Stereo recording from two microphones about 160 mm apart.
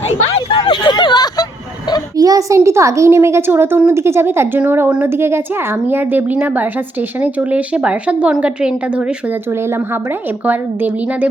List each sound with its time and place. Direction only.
0.1 s a sound: 40° left (ahead or behind)
0.6 s hubbub: 30° left (ahead or behind)
2.1 s a child's voice: 20° right (ahead or behind); by 9.0 s 5° right (ahead or behind)
10.4 s a woman's voice: 10° right (ahead or behind)